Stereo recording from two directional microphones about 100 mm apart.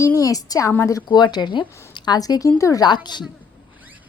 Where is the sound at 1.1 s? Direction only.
45° left (ahead or behind).